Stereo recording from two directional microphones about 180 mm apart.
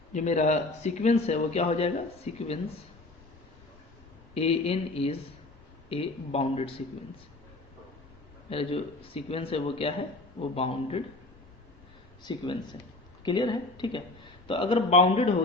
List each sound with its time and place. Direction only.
0.1 s speech: 40° left (ahead or behind)
4.4 s speech: 35° left (ahead or behind)
8.4 s speech: 30° left (ahead or behind)
12.2 s speech: 25° left (ahead or behind)